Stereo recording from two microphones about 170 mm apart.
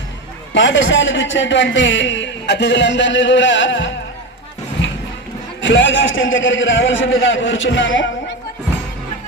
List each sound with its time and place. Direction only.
0.5 s a man's voice: 90° left
5.6 s a man's voice: 90° left